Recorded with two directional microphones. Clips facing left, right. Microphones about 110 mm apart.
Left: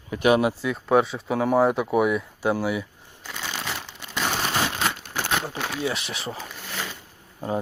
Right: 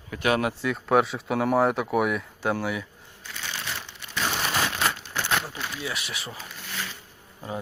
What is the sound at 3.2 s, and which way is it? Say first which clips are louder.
Shuffling cards: left 4 dB; 90° left.